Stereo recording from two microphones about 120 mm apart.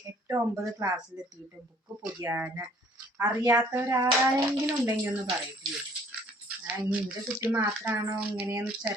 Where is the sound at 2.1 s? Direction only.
25° right (ahead or behind).